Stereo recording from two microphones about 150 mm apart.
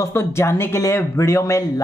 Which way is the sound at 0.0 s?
15° left (ahead or behind).